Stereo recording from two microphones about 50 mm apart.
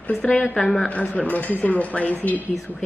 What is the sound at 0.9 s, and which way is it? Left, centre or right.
A woman's voice, left.